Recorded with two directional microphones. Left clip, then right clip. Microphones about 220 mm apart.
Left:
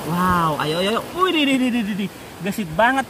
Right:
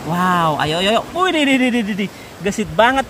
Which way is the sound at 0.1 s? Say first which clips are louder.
Right 3 dB; 15° right (ahead or behind).